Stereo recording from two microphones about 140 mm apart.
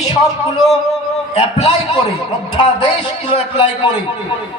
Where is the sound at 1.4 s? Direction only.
40° left (ahead or behind).